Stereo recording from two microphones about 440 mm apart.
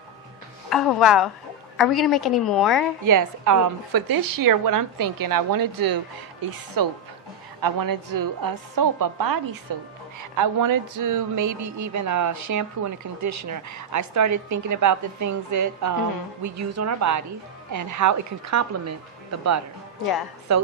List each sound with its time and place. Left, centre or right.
0.7 s a woman's voice: centre
3.0 s a woman's voice: right